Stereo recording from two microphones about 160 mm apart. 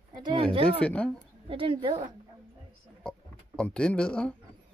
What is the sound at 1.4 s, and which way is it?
Speech, 35° right (ahead or behind).